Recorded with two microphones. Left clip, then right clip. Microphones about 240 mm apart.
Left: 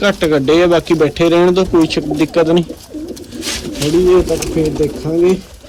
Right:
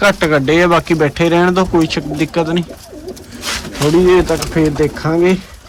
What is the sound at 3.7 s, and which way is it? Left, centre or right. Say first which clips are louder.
Speech: right 1 dB; centre.